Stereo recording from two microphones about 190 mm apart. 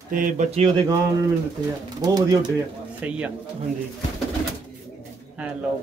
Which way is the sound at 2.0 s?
20° right (ahead or behind).